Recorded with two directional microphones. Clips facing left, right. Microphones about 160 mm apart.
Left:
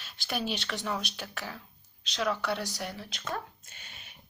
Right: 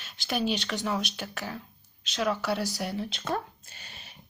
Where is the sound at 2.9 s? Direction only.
25° right (ahead or behind).